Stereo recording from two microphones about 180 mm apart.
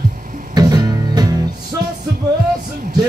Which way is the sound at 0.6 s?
20° right (ahead or behind).